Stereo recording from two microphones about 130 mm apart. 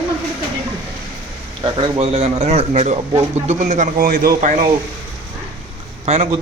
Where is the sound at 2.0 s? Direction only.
50° right (ahead or behind); by 4.6 s 85° right.